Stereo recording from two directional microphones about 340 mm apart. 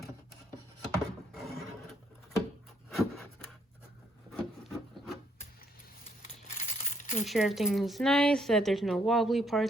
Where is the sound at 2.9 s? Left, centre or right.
Centre.